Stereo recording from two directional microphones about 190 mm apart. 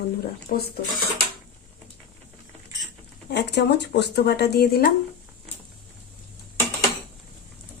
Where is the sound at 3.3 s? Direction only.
60° left (ahead or behind).